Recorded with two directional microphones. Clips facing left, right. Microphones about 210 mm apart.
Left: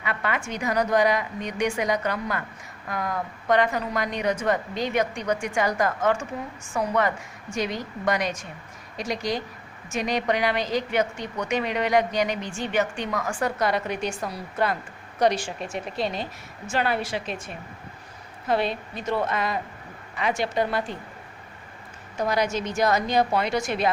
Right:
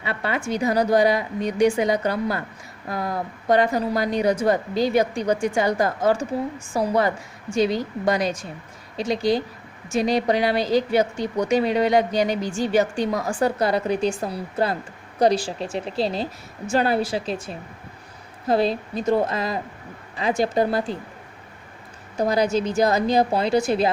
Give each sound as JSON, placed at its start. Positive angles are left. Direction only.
{"t": 0.0, "sound": "speech", "side_deg": -30}
{"t": 22.2, "sound": "speech", "side_deg": -35}